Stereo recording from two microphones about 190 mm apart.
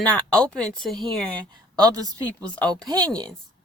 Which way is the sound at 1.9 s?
20° right (ahead or behind).